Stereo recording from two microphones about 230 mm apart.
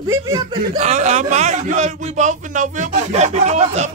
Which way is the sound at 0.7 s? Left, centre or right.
Right.